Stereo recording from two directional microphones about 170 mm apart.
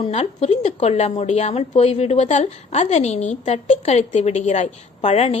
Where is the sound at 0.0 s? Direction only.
40° left (ahead or behind).